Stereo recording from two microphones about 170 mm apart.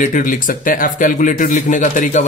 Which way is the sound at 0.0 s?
50° left (ahead or behind).